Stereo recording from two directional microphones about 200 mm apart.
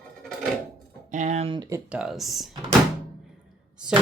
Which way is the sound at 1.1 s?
35° right (ahead or behind).